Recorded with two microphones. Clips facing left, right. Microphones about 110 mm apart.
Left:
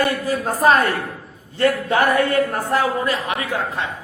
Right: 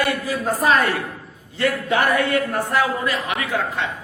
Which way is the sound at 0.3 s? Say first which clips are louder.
Left 4 dB; 45° left (ahead or behind).